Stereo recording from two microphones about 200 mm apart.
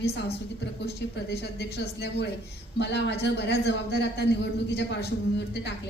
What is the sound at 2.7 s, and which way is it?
Speech, 60° left (ahead or behind).